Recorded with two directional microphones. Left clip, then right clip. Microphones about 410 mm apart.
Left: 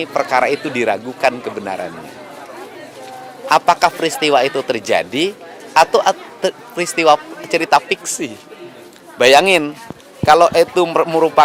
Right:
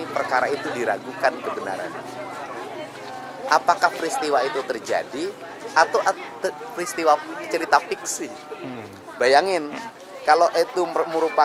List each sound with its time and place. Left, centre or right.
0.1 s speech: left
3.5 s speech: left